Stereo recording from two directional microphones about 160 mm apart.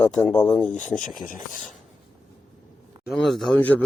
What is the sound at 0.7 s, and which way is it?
Speech, 50° left (ahead or behind).